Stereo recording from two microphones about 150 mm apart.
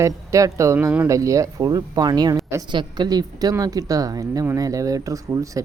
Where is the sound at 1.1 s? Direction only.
20° right (ahead or behind).